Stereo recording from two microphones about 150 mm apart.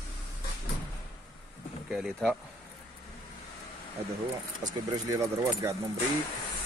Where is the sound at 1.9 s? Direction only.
Centre (ahead or behind).